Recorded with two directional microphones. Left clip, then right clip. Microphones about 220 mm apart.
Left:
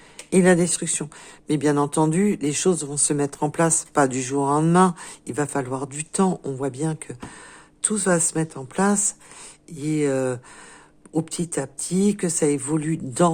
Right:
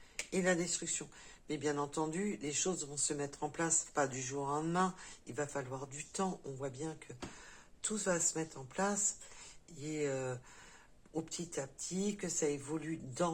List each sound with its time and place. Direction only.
0.3 s speech: 50° left (ahead or behind)